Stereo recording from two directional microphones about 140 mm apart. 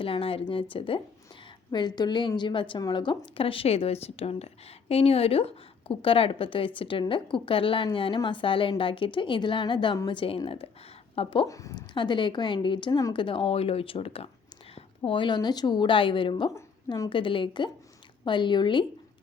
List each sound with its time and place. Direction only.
0.0 s a woman's voice: 40° left (ahead or behind)
11.4 s a woman's voice: 25° left (ahead or behind)
11.9 s a woman's voice: 35° left (ahead or behind)
13.2 s a woman's voice: 40° left (ahead or behind)